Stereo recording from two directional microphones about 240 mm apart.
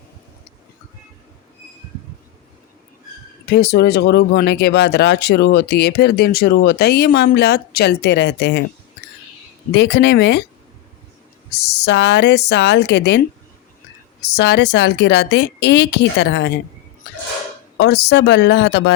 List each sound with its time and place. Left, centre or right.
3.5 s speech: left
9.7 s speech: left
11.5 s speech: left
17.7 s speech: left